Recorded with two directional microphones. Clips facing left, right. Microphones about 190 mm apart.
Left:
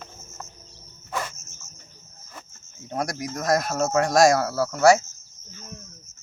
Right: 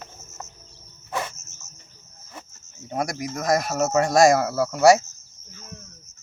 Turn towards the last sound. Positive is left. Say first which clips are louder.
# right 2 dB
turn(degrees=-20)  # may be behind; listen again after turning